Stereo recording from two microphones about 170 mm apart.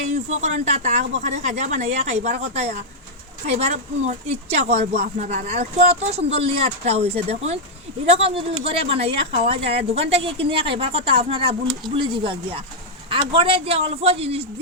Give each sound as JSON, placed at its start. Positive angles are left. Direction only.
{"t": 0.1, "sound": "speech", "side_deg": -45}